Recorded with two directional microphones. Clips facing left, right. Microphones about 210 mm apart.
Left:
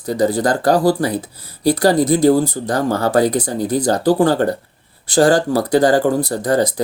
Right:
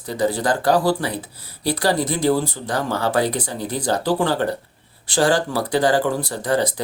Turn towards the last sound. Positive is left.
turn(degrees=40)  # may be behind; listen again after turning